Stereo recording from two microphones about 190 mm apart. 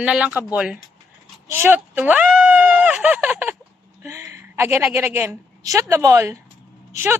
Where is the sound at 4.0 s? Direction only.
15° right (ahead or behind).